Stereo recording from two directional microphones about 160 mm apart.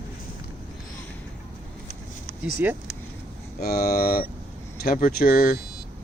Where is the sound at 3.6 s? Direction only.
70° left (ahead or behind).